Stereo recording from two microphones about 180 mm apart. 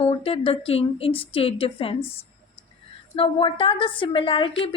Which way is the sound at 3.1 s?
30° left (ahead or behind).